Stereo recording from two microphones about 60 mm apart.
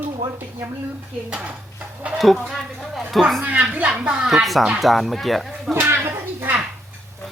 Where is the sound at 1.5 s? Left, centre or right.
Right.